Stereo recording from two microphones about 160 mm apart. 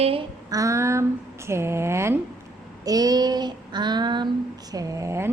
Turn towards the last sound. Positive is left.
turn(degrees=-15)  # may be behind; listen again after turning